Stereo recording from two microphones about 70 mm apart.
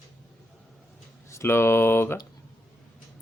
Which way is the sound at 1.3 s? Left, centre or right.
Left.